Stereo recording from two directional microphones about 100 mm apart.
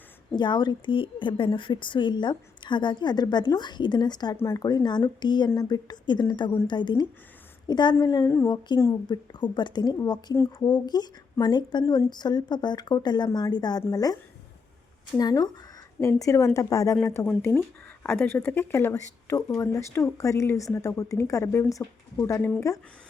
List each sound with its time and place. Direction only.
0.3 s a woman's voice: 50° left (ahead or behind)
4.4 s a woman's voice: 30° left (ahead or behind)
15.2 s a woman's voice: 40° left (ahead or behind)
17.2 s a woman's voice: 15° left (ahead or behind); by 22.8 s 35° left (ahead or behind)